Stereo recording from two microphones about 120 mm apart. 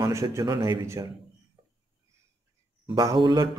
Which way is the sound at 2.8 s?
35° right (ahead or behind).